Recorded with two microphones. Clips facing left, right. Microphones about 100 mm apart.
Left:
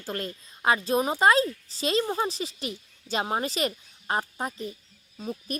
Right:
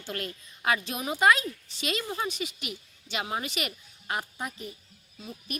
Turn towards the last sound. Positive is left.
turn(degrees=45)  # may be behind; listen again after turning